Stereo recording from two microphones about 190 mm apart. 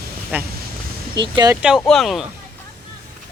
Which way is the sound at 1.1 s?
25° right (ahead or behind).